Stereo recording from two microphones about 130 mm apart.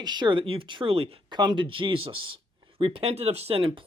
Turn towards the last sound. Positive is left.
turn(degrees=-40)  # may be behind; listen again after turning